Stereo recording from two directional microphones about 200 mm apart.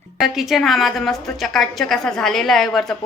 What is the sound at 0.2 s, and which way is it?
A woman's voice, centre (ahead or behind).